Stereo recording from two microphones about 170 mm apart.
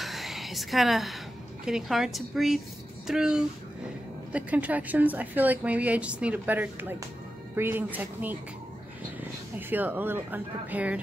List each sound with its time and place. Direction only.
0.0 s a woman's voice: centre (ahead or behind)